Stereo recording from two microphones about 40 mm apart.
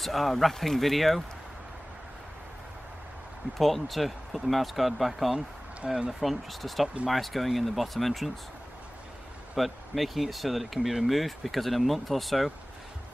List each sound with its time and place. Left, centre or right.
0.0 s speech: centre
3.5 s speech: centre
5.9 s speech: centre
6.2 s speech: centre
9.6 s speech: centre